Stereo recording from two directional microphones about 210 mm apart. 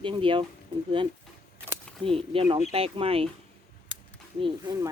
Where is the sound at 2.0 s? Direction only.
25° right (ahead or behind).